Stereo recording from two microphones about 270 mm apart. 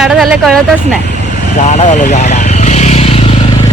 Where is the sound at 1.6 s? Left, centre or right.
Left.